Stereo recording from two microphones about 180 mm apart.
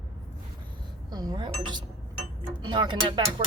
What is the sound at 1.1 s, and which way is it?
Speech, 20° right (ahead or behind).